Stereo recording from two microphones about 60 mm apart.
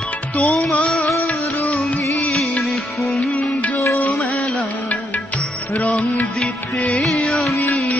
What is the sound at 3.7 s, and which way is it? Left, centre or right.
Music, left.